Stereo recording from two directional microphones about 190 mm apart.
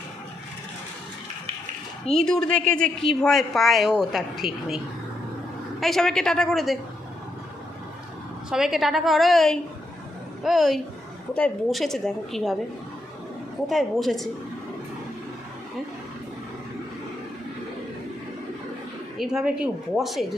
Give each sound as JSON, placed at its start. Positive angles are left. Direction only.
{"t": 2.1, "sound": "a woman's voice", "side_deg": 5}
{"t": 8.5, "sound": "a woman's voice", "side_deg": 0}
{"t": 13.7, "sound": "a woman's voice", "side_deg": 0}
{"t": 19.1, "sound": "a woman's voice", "side_deg": -5}